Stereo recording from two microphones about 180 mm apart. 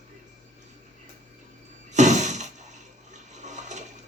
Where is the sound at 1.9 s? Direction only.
40° right (ahead or behind).